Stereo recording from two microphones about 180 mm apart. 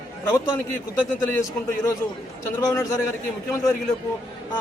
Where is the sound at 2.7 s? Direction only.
20° left (ahead or behind).